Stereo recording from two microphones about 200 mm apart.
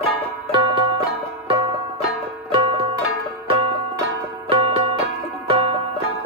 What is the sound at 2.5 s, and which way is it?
Music, 30° right (ahead or behind).